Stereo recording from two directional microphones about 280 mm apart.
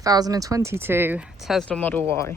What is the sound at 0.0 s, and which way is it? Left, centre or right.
Speech, centre.